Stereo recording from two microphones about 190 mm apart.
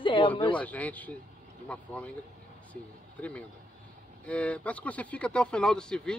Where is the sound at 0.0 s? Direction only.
25° left (ahead or behind).